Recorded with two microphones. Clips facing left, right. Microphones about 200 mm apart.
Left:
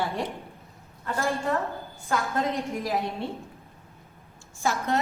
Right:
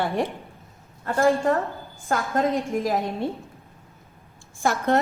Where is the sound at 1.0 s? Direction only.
50° right (ahead or behind).